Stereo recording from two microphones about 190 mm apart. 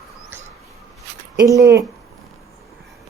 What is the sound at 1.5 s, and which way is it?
Speech, 15° right (ahead or behind).